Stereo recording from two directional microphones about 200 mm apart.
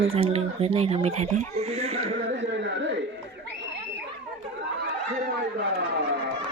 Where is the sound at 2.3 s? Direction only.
65° right (ahead or behind).